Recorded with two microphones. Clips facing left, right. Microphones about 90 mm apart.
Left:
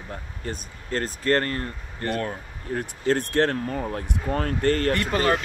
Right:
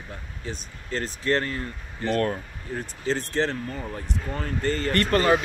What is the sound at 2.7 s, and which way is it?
Speech, 60° left (ahead or behind).